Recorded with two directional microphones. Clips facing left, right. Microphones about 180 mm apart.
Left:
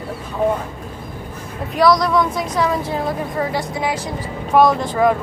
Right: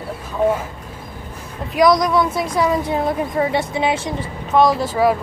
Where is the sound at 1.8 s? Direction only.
15° right (ahead or behind).